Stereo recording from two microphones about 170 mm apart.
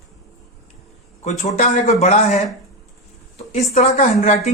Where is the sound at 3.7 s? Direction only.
40° left (ahead or behind).